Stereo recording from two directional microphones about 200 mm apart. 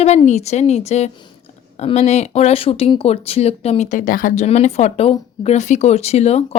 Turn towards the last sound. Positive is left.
turn(degrees=30)  # may be behind; listen again after turning